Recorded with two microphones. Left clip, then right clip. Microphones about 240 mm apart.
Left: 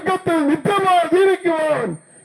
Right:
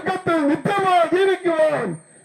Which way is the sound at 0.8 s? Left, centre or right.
Centre.